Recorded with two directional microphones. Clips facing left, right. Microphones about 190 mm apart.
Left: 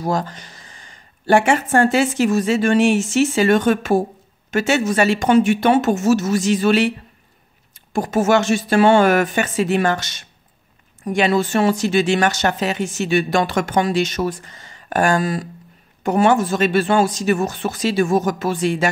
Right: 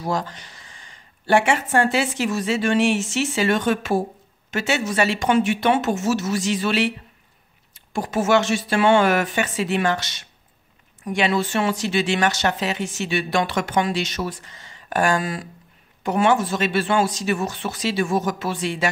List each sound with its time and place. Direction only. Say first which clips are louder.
0.0 s speech: left 3 dB; 45° left (ahead or behind)
7.9 s speech: left 3 dB; 45° left (ahead or behind)